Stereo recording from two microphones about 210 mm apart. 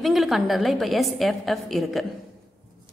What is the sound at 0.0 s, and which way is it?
A woman's voice, centre (ahead or behind).